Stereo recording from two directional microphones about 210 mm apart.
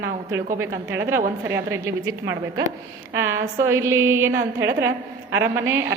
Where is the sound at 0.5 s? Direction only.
10° right (ahead or behind).